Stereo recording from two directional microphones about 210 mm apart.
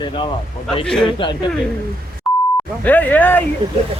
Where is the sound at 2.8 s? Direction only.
10° left (ahead or behind).